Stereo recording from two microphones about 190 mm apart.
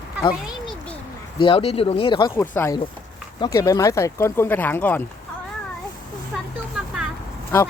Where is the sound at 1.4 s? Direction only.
30° left (ahead or behind).